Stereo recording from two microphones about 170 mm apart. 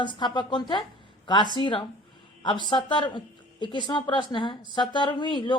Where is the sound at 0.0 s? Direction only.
25° left (ahead or behind).